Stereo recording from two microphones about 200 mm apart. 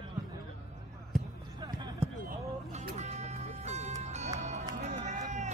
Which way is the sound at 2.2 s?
40° right (ahead or behind).